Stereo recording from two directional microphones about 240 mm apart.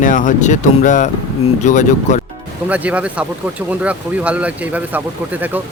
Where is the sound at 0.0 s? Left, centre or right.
Left.